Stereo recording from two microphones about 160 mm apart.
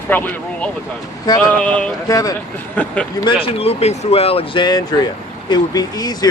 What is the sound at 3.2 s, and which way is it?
Speech, 35° left (ahead or behind).